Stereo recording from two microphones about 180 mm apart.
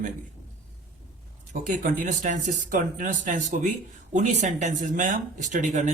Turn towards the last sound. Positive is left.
turn(degrees=-45)  # may be behind; listen again after turning